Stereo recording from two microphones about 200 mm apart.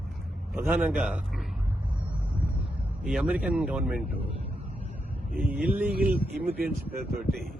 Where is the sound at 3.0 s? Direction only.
5° right (ahead or behind).